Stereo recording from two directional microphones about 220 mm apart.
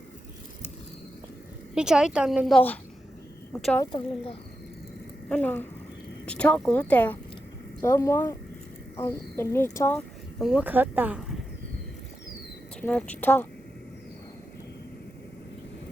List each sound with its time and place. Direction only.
1.7 s a woman's voice: 5° right (ahead or behind)
3.9 s speech: 25° left (ahead or behind)
5.3 s a woman's voice: 5° left (ahead or behind)
10.4 s speech: 5° right (ahead or behind)
12.8 s speech: 5° left (ahead or behind)